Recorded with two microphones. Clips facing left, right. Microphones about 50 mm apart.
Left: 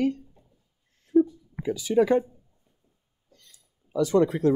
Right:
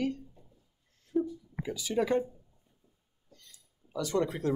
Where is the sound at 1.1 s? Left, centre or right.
Left.